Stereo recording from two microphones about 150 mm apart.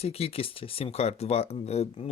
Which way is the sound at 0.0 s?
40° left (ahead or behind).